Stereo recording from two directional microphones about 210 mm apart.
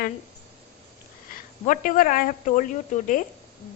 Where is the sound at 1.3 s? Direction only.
40° left (ahead or behind).